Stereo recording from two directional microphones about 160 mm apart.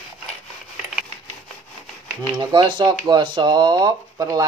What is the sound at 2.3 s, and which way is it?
Speech, 25° right (ahead or behind).